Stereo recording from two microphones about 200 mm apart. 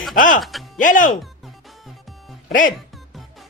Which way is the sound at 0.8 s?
40° left (ahead or behind).